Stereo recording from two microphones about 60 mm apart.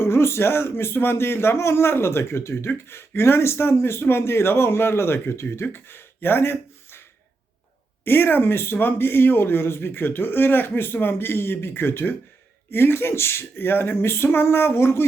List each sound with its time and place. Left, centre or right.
0.0 s speech: left
8.0 s speech: left